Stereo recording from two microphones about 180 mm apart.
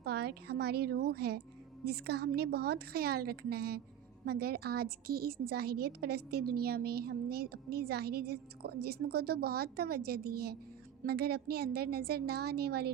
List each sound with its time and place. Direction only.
0.0 s a woman's voice: 65° right (ahead or behind)